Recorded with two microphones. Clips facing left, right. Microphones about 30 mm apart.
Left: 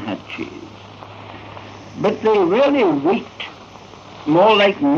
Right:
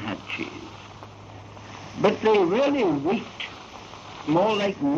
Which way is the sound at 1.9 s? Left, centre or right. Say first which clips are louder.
Left 4 dB; centre.